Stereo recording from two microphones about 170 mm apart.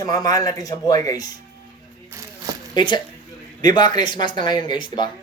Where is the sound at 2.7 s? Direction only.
25° left (ahead or behind).